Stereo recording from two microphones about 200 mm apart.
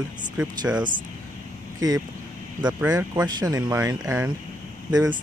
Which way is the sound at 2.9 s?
20° right (ahead or behind).